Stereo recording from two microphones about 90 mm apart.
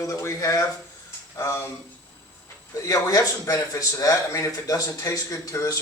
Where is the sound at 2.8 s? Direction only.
40° left (ahead or behind).